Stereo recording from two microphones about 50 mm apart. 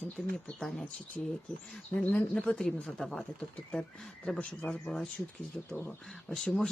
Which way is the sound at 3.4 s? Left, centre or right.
Centre.